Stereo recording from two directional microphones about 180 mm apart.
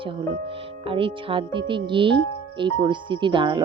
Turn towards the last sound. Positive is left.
turn(degrees=-25)  # may be behind; listen again after turning